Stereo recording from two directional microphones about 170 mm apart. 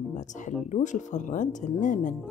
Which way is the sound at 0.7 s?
45° left (ahead or behind).